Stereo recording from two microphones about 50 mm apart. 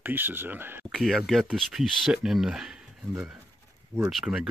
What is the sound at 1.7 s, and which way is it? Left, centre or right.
Speech, centre.